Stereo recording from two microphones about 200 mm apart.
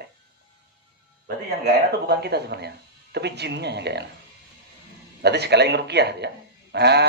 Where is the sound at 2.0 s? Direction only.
55° right (ahead or behind).